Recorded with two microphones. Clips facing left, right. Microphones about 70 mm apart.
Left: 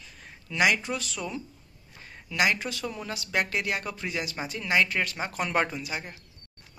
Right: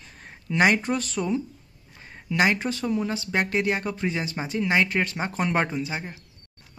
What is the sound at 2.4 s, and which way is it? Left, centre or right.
Speech, right.